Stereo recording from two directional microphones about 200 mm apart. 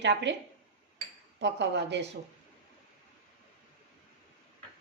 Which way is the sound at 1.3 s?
60° right (ahead or behind).